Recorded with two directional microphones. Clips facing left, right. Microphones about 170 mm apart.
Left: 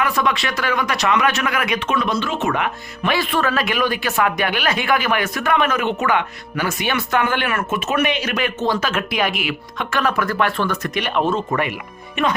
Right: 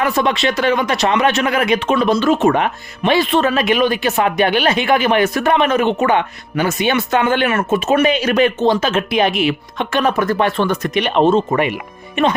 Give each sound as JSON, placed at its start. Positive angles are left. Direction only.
{"t": 0.0, "sound": "speech", "side_deg": -30}
{"t": 3.0, "sound": "speech", "side_deg": -25}